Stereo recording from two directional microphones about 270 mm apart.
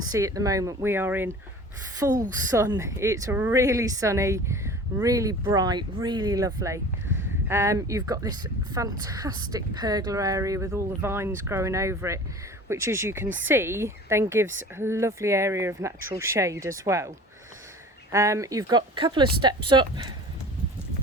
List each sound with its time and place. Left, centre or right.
0.1 s speech: centre
2.0 s a woman's voice: right
2.6 s speech: centre
18.1 s speech: centre